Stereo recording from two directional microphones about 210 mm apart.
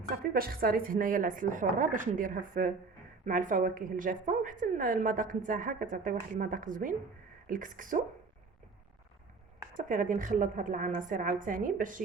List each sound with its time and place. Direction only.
0.3 s a woman's voice: 45° right (ahead or behind)
9.7 s a woman's voice: 40° right (ahead or behind)